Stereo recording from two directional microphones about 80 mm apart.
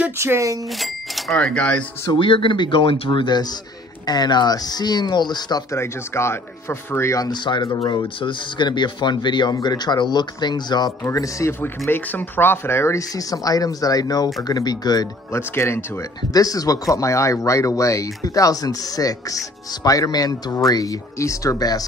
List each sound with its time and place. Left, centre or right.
0.2 s speech: right
0.7 s speech: centre
2.1 s speech: left
4.0 s speech: left
5.7 s speech: left
7.2 s speech: left
8.2 s speech: left
11.1 s speech: left
11.9 s speech: left
13.1 s speech: left
15.3 s speech: left
16.3 s speech: left